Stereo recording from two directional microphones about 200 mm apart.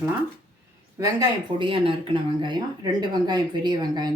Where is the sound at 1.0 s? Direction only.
20° right (ahead or behind).